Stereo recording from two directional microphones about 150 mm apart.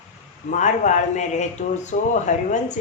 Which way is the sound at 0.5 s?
55° left (ahead or behind).